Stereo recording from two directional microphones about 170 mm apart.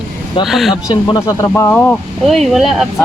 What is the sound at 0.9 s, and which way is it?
Speech, 20° left (ahead or behind).